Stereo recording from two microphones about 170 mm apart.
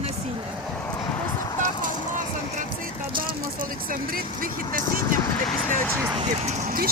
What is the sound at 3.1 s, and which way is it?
Speech, 55° right (ahead or behind).